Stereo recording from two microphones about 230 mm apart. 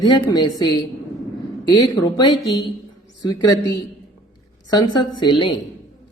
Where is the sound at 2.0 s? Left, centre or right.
Centre.